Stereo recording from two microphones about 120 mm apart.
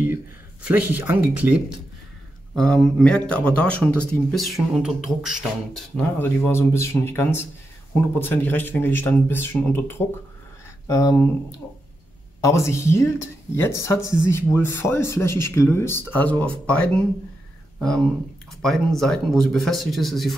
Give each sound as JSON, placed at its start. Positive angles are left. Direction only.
{"t": 0.6, "sound": "speech", "side_deg": -10}
{"t": 2.5, "sound": "speech", "side_deg": 5}
{"t": 6.1, "sound": "speech", "side_deg": 15}
{"t": 10.9, "sound": "speech", "side_deg": 30}
{"t": 12.4, "sound": "speech", "side_deg": 25}
{"t": 18.6, "sound": "speech", "side_deg": 5}